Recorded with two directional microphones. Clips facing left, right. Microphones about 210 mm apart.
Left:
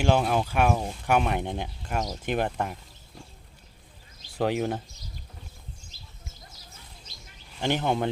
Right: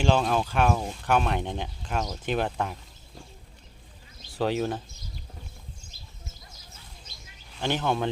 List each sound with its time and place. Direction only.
0.0 s speech: 10° left (ahead or behind)
4.4 s speech: 15° left (ahead or behind)
7.6 s speech: 15° left (ahead or behind)